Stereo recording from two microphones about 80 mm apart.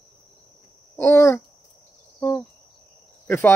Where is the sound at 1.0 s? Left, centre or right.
Left.